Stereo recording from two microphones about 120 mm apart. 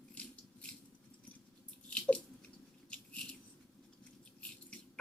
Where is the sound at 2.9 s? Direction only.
10° left (ahead or behind).